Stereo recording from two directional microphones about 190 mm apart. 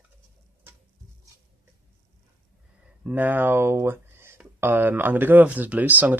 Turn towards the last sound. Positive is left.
turn(degrees=-10)  # may be behind; listen again after turning